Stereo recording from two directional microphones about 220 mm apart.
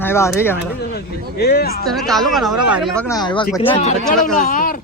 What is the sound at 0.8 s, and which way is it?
Speech, 45° left (ahead or behind).